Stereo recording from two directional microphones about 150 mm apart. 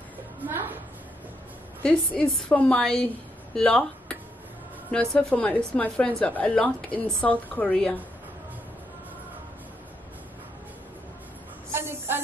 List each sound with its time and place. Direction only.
0.4 s a sound: 15° right (ahead or behind)
1.8 s a woman's voice: 10° left (ahead or behind)
11.7 s snake: 15° right (ahead or behind)